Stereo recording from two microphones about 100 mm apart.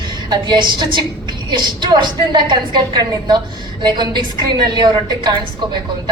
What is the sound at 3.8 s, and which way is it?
Speech, 45° right (ahead or behind).